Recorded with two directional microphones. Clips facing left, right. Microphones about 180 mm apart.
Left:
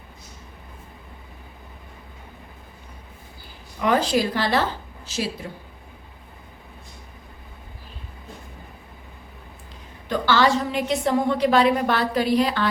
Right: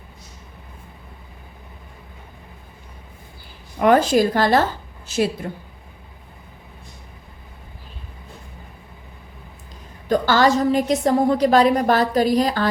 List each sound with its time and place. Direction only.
3.8 s speech: 55° right (ahead or behind)
10.1 s a woman's voice: 45° right (ahead or behind)